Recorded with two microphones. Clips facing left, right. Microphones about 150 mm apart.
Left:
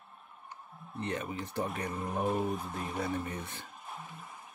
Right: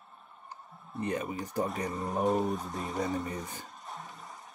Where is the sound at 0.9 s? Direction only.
5° right (ahead or behind).